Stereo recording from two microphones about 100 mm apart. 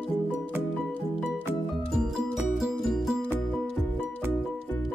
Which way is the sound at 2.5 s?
Centre (ahead or behind).